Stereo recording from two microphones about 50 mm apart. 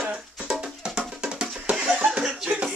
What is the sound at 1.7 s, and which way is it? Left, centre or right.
Laughter, centre.